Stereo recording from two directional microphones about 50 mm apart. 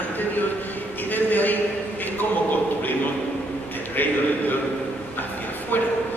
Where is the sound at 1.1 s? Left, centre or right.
Left.